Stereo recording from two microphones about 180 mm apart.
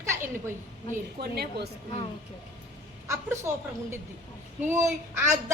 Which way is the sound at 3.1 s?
15° right (ahead or behind).